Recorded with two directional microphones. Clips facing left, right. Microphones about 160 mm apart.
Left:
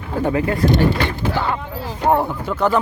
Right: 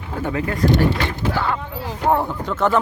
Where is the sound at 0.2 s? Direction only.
30° left (ahead or behind).